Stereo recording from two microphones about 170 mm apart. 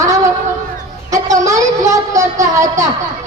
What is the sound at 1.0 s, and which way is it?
A woman's voice, 20° right (ahead or behind).